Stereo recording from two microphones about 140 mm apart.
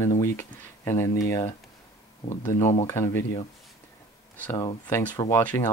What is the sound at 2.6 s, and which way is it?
Speech, 50° left (ahead or behind).